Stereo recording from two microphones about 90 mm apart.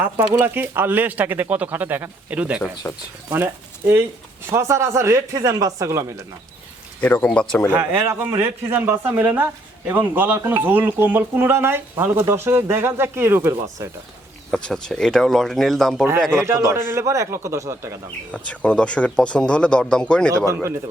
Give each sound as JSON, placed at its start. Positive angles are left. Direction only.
{"t": 0.0, "sound": "speech", "side_deg": -25}
{"t": 2.8, "sound": "speech", "side_deg": 20}
{"t": 3.2, "sound": "speech", "side_deg": -25}
{"t": 7.0, "sound": "speech", "side_deg": 20}
{"t": 7.7, "sound": "speech", "side_deg": -25}
{"t": 14.5, "sound": "speech", "side_deg": 5}
{"t": 16.3, "sound": "speech", "side_deg": -30}
{"t": 18.3, "sound": "speech", "side_deg": 15}
{"t": 20.3, "sound": "speech", "side_deg": -35}